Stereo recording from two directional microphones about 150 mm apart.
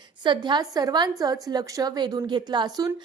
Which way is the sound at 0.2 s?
30° right (ahead or behind).